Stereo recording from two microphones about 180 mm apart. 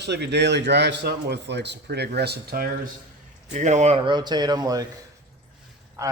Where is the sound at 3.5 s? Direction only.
40° right (ahead or behind).